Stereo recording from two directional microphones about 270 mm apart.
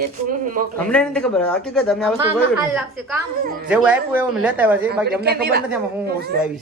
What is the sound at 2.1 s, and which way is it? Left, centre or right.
Speech, centre.